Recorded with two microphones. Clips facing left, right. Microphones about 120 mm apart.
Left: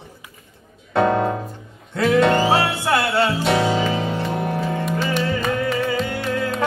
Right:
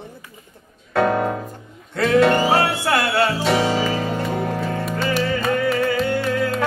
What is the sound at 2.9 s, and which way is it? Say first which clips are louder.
Music: left 2 dB; 25° left (ahead or behind).